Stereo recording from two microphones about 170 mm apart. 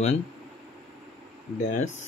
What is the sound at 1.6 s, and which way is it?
Speech, 45° left (ahead or behind).